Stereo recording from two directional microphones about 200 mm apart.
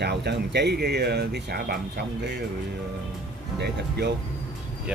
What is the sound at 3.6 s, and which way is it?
Speech, 55° right (ahead or behind).